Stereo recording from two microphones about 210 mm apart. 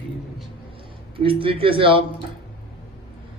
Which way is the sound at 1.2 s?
25° right (ahead or behind).